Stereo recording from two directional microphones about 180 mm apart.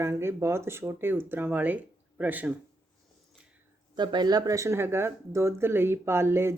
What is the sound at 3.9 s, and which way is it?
Speech, 25° right (ahead or behind).